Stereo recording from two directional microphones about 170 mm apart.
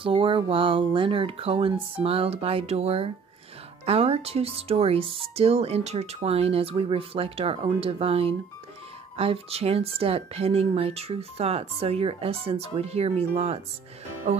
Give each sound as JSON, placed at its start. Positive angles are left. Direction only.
{"t": 0.0, "sound": "speech", "side_deg": -30}